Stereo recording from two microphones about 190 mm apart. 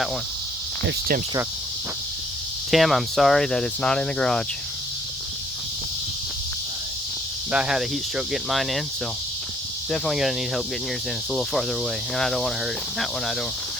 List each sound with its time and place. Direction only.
0.9 s cricket: 50° right (ahead or behind)
2.6 s speech: centre (ahead or behind)
7.5 s speech: 5° right (ahead or behind)
9.9 s speech: centre (ahead or behind)